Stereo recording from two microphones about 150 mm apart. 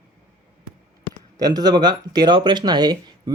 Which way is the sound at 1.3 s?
25° right (ahead or behind).